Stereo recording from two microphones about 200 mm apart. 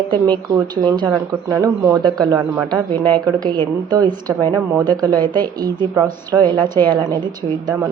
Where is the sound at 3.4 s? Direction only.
20° right (ahead or behind).